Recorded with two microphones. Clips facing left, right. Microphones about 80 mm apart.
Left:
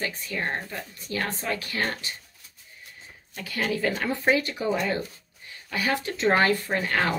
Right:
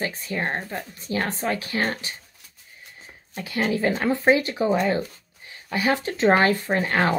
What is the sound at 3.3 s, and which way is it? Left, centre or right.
Speech, right.